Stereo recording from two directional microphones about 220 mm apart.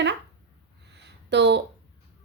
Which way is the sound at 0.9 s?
50° right (ahead or behind).